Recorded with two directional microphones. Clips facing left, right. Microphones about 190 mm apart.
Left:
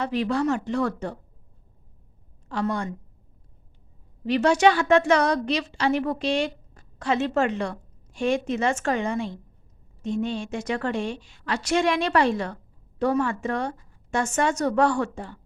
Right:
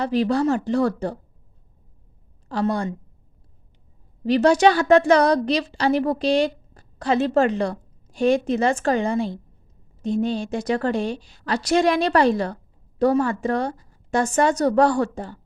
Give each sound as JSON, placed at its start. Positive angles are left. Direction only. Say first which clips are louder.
{"t": 0.0, "sound": "a woman's voice", "louder": "right 4 dB", "side_deg": -35}
{"t": 2.5, "sound": "a woman's voice", "louder": "right 4 dB", "side_deg": -35}
{"t": 4.3, "sound": "a woman's voice", "louder": "right 3 dB", "side_deg": -35}